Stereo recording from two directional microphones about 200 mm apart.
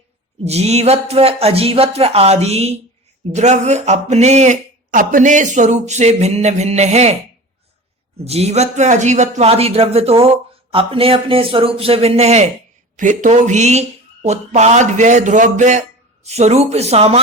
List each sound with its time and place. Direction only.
0.4 s speech: 30° right (ahead or behind)
8.2 s speech: 30° right (ahead or behind)